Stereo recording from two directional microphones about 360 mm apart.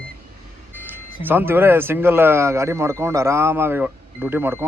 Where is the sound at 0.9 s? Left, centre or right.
Centre.